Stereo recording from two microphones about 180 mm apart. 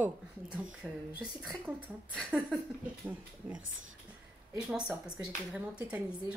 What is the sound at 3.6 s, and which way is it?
Speech, 90° right.